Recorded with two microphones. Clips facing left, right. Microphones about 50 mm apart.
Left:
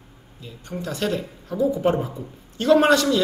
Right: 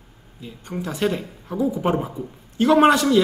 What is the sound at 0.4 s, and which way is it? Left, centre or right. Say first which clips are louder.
Speech: right 2 dB; centre.